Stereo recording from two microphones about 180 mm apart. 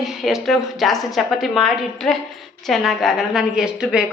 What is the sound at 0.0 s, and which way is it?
A woman's voice, centre (ahead or behind).